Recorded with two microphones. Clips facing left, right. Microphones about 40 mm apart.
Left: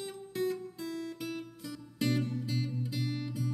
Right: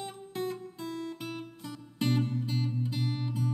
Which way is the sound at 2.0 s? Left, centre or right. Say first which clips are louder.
Right 2 dB; right.